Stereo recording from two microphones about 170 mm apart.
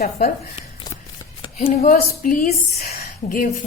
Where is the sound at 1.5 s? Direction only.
40° left (ahead or behind).